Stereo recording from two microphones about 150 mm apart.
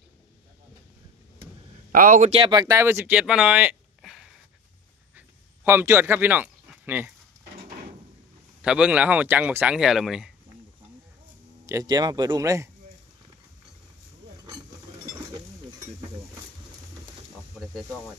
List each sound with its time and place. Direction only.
1.9 s speech: 65° right (ahead or behind)
2.4 s speech: 25° right (ahead or behind); by 3.7 s 10° right (ahead or behind)
4.0 s a sound: centre (ahead or behind)
5.1 s a sound: 15° right (ahead or behind)
8.6 s speech: 5° right (ahead or behind)
11.6 s speech: 25° right (ahead or behind)